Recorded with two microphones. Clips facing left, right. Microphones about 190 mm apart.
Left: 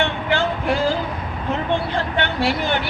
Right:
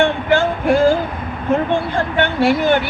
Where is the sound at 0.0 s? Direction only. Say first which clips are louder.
Right 6 dB; 50° right (ahead or behind).